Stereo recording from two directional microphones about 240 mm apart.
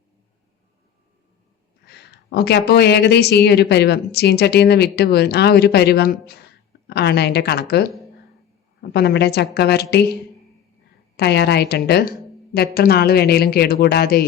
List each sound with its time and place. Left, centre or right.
1.9 s speech: left
11.2 s a woman's voice: left